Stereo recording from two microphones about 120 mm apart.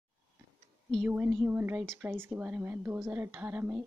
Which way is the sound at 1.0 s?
15° right (ahead or behind).